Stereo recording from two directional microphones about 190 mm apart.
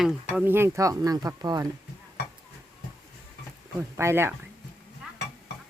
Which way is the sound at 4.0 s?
15° right (ahead or behind).